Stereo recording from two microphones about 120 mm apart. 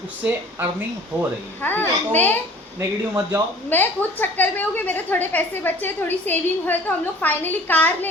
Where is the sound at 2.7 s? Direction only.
20° right (ahead or behind).